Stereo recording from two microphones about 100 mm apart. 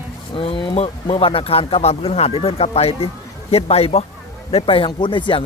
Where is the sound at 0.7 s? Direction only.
75° left (ahead or behind).